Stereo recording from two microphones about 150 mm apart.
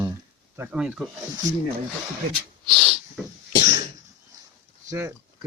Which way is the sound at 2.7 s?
Centre (ahead or behind).